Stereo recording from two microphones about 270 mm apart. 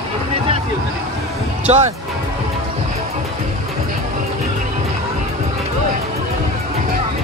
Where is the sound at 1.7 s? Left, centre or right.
Right.